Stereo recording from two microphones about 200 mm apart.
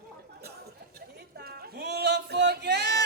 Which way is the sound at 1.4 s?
50° right (ahead or behind).